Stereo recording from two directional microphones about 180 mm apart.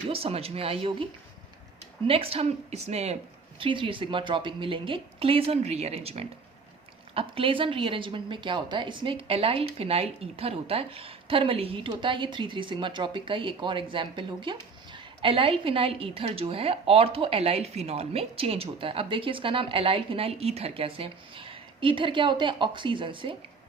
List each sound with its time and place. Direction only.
0.1 s speech: 35° right (ahead or behind)
2.0 s a woman's voice: 30° right (ahead or behind)